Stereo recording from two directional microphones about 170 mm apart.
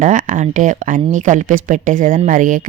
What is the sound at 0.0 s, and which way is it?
Speech, 50° right (ahead or behind).